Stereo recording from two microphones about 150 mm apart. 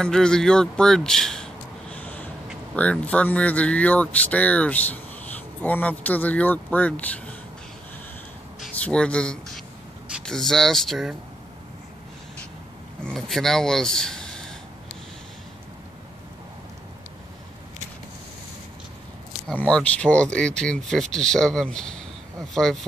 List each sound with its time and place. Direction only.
0.0 s speech: 5° left (ahead or behind)
8.8 s speech: 5° left (ahead or behind)
13.0 s speech: 5° left (ahead or behind)
19.5 s speech: 10° left (ahead or behind)